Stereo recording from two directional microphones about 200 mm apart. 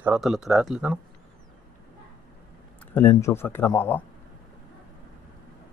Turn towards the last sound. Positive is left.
turn(degrees=10)  # may be behind; listen again after turning